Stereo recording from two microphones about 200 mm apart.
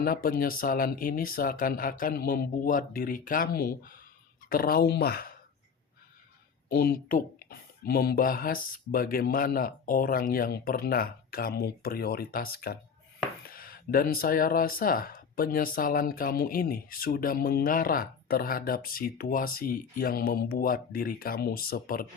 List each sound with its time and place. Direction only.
0.0 s speech: 45° left (ahead or behind)
6.7 s speech: 45° left (ahead or behind)